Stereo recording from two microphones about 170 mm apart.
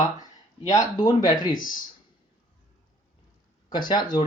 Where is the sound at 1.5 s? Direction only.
50° left (ahead or behind).